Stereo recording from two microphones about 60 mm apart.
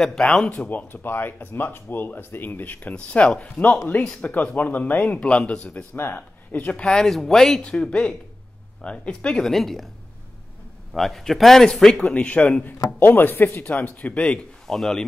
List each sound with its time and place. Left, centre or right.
0.0 s speech: centre
0.5 s speech: left
6.8 s a man's voice: centre
9.5 s a man's voice: centre
10.9 s a man's voice: centre
13.0 s speech: left
14.7 s speech: centre